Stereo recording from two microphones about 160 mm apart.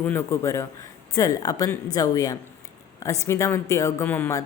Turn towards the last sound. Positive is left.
turn(degrees=15)  # may be behind; listen again after turning